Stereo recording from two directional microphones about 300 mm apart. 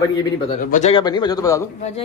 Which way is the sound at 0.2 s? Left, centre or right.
Left.